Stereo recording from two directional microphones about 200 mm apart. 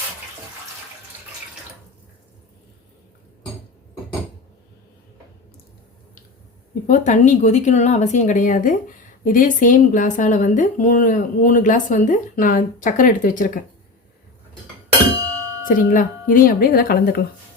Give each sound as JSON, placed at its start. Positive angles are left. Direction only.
{"t": 6.8, "sound": "speech", "side_deg": 40}
{"t": 15.6, "sound": "speech", "side_deg": 45}